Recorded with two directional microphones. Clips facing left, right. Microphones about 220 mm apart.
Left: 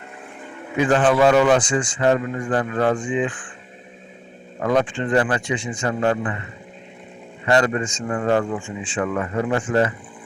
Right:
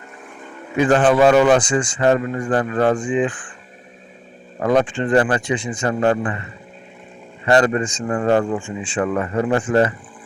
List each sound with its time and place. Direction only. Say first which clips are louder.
0.9 s a man's voice: right 2 dB; 35° right (ahead or behind)
4.6 s a man's voice: right 3 dB; 35° right (ahead or behind)
7.4 s a man's voice: right 3 dB; 35° right (ahead or behind)